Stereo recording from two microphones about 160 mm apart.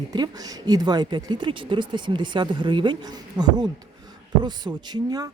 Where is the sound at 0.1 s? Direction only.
25° right (ahead or behind).